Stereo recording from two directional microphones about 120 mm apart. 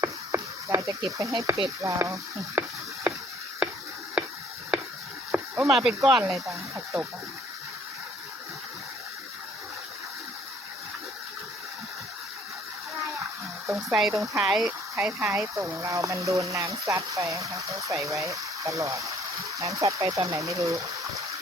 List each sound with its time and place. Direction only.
0.0 s speech: 25° right (ahead or behind)
5.3 s a sound: 10° right (ahead or behind)
6.1 s speech: 10° right (ahead or behind)
6.3 s speech: 25° right (ahead or behind)
13.9 s speech: centre (ahead or behind)
14.9 s speech: 20° right (ahead or behind)